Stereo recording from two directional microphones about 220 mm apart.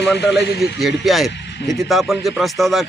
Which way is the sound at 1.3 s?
50° left (ahead or behind).